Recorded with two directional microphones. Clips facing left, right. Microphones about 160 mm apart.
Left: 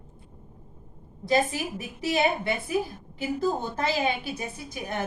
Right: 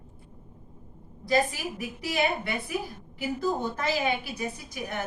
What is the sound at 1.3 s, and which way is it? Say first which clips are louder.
A woman's voice: left 1 dB; 25° left (ahead or behind).